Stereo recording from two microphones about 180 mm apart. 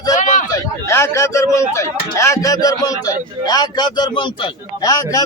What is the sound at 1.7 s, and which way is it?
A man's voice, 15° left (ahead or behind).